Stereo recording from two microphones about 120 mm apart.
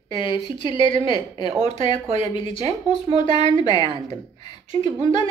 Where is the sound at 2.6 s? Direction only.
80° right.